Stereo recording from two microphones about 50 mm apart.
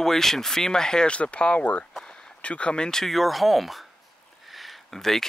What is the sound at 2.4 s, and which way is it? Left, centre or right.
Speech, left.